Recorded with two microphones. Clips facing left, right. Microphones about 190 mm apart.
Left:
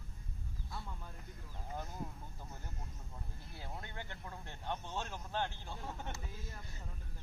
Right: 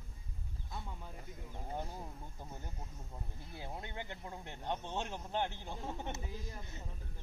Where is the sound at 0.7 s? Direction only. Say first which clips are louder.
Right 1 dB; 20° right (ahead or behind).